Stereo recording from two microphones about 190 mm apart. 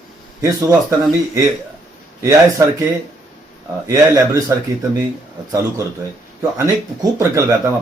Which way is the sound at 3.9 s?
15° right (ahead or behind).